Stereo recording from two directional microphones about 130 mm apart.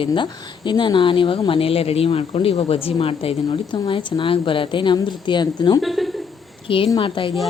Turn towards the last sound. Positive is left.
turn(degrees=40)  # may be behind; listen again after turning